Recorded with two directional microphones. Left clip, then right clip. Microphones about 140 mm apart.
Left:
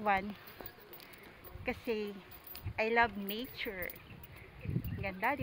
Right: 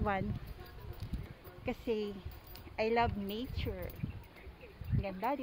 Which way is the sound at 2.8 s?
10° right (ahead or behind).